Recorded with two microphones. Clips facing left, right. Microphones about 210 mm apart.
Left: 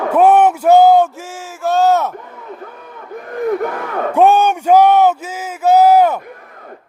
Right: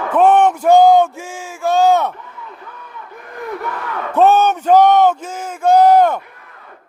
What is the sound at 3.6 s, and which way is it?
Battle cry, 50° left (ahead or behind).